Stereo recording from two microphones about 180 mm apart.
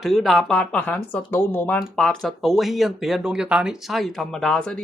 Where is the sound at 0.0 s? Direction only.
Centre (ahead or behind).